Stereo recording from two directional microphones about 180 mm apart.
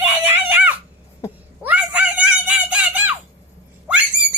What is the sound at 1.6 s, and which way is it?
Screaming, 10° right (ahead or behind).